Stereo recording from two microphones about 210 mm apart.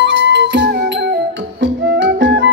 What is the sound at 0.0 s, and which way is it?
Music, 55° right (ahead or behind).